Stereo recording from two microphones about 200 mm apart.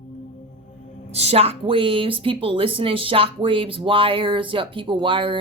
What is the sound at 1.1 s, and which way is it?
A woman's voice, 30° right (ahead or behind).